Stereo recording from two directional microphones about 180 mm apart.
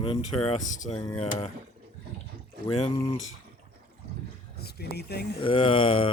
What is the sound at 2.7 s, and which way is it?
Speech, 30° left (ahead or behind).